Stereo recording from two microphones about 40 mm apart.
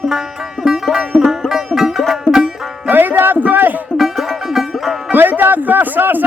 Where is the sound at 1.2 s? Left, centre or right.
Centre.